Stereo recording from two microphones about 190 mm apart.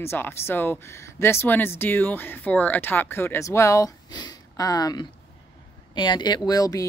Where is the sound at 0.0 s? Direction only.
10° left (ahead or behind).